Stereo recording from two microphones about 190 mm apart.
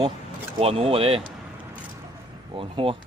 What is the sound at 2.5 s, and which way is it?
Speech, 30° right (ahead or behind).